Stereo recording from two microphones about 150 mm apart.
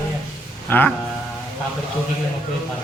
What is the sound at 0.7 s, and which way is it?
Speech, 10° left (ahead or behind).